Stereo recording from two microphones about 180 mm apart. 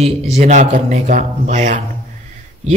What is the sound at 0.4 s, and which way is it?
Speech, 40° right (ahead or behind).